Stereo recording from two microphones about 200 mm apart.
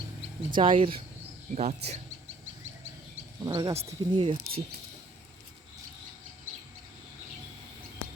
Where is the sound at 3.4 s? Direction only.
20° right (ahead or behind).